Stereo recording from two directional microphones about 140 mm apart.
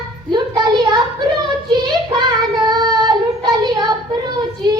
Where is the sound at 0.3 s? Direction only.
30° right (ahead or behind).